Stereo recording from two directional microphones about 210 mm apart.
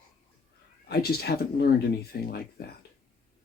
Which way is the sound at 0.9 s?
50° left (ahead or behind).